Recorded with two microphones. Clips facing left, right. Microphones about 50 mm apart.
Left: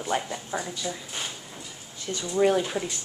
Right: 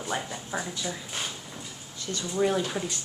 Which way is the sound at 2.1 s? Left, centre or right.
Left.